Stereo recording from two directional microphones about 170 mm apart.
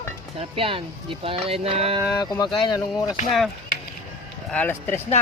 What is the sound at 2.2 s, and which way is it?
Speech, 25° left (ahead or behind).